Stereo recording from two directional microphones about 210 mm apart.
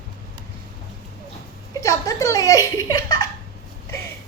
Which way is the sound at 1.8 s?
15° left (ahead or behind).